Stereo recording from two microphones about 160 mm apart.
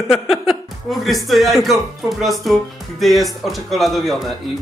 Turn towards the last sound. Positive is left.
turn(degrees=0)  # may be behind; listen again after turning